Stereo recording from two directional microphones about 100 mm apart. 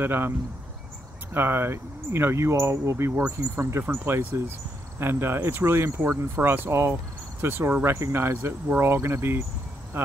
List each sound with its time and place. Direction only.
0.0 s speech: 20° right (ahead or behind)
1.3 s speech: 20° right (ahead or behind)
3.3 s speech: 20° right (ahead or behind)
9.9 s insect: 25° right (ahead or behind)